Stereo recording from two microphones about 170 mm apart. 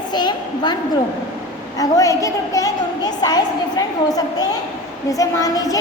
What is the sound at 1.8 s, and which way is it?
A woman's voice, 20° left (ahead or behind).